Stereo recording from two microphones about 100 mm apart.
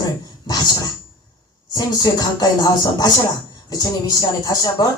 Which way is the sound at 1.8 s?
40° left (ahead or behind).